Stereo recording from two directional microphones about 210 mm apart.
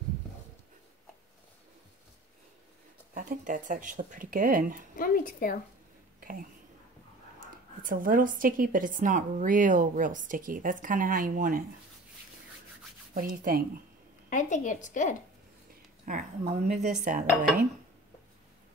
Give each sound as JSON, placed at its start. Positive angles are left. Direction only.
{"t": 3.2, "sound": "a woman's voice", "side_deg": -40}
{"t": 4.9, "sound": "a woman's voice", "side_deg": 40}
{"t": 7.8, "sound": "a woman's voice", "side_deg": -40}
{"t": 13.1, "sound": "speech", "side_deg": -40}
{"t": 14.3, "sound": "a woman's voice", "side_deg": 35}
{"t": 16.1, "sound": "a woman's voice", "side_deg": -35}